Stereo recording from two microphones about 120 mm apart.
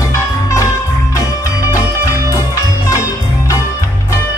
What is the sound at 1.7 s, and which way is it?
Music, 25° left (ahead or behind).